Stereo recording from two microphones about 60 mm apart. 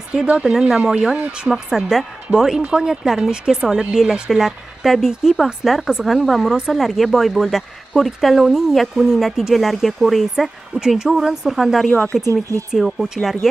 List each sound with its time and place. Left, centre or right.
0.4 s speech: centre
1.1 s speech: right
1.5 s speech: centre
11.9 s speech: left
12.3 s speech: right
12.7 s speech: centre